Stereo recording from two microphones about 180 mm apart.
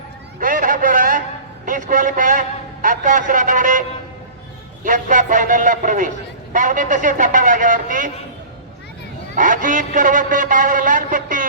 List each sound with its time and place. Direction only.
0.3 s a sound: 50° right (ahead or behind)
1.6 s a man's voice: 45° right (ahead or behind)
9.3 s a man's voice: 45° right (ahead or behind)